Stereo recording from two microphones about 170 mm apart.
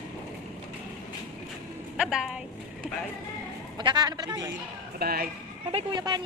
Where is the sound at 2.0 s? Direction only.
Centre (ahead or behind).